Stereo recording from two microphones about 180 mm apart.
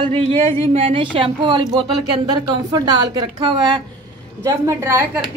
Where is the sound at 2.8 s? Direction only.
20° right (ahead or behind).